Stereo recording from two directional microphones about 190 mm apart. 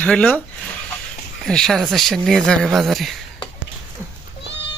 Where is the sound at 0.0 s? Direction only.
5° left (ahead or behind).